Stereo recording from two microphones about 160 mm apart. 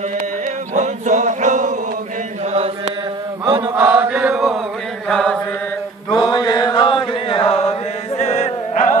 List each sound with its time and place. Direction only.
0.7 s chant: 50° right (ahead or behind)
2.5 s chant: 40° right (ahead or behind)
3.7 s chant: 10° right (ahead or behind); by 5.4 s 5° left (ahead or behind)
6.2 s chant: 25° left (ahead or behind); by 8.9 s 50° left (ahead or behind)